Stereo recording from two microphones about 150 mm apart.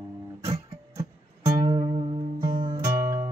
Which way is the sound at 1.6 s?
40° right (ahead or behind).